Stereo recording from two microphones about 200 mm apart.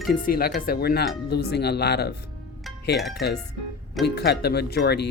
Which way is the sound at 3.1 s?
55° left (ahead or behind).